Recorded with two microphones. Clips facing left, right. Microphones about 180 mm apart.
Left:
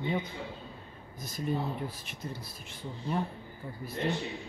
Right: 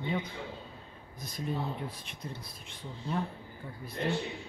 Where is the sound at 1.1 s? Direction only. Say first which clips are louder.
Left 3 dB; centre (ahead or behind).